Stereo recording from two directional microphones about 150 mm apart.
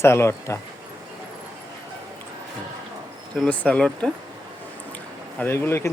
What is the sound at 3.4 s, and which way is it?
Speech, 5° left (ahead or behind).